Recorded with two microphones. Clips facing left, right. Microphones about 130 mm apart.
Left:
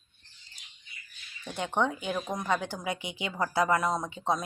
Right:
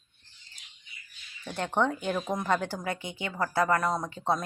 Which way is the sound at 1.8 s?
5° left (ahead or behind).